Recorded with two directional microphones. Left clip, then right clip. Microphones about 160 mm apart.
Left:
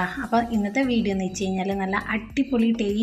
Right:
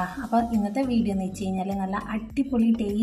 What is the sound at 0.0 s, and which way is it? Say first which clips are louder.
Speech: left 2 dB; 20° left (ahead or behind).